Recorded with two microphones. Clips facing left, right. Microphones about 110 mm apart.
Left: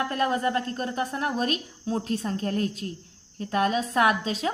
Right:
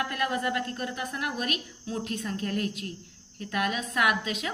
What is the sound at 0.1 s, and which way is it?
A woman's voice, 30° left (ahead or behind).